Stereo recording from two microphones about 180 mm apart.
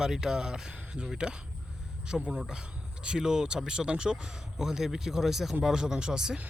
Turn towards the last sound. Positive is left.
turn(degrees=-5)  # may be behind; listen again after turning